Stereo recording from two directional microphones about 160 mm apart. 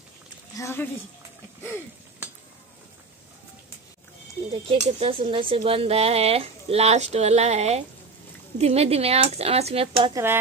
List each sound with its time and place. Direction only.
0.6 s a woman's voice: 15° left (ahead or behind)
4.6 s speech: 35° right (ahead or behind)